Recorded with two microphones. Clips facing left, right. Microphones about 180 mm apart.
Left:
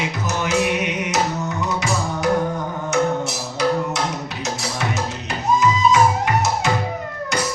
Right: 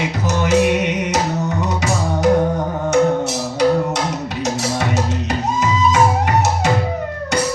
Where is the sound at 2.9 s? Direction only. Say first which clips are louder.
Right 5 dB; 65° right (ahead or behind).